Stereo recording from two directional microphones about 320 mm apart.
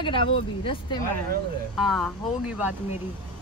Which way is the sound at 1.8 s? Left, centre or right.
Centre.